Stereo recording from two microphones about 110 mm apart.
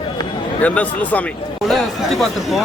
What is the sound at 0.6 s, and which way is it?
Speech, 15° left (ahead or behind).